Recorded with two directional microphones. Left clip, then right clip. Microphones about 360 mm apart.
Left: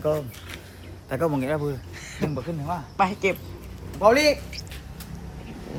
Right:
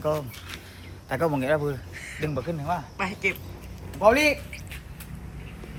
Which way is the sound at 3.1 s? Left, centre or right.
Left.